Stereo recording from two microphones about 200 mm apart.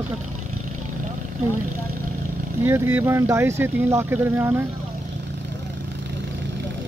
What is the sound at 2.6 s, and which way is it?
Speech, 10° right (ahead or behind).